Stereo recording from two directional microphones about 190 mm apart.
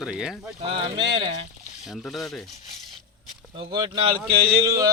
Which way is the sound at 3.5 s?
25° right (ahead or behind).